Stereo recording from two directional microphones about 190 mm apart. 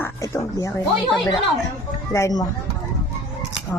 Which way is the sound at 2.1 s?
15° left (ahead or behind).